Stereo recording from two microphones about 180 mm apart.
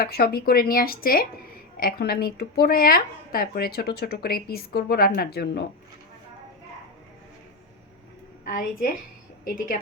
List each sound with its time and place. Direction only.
0.0 s a woman's voice: 60° left (ahead or behind)
8.4 s a woman's voice: 50° left (ahead or behind)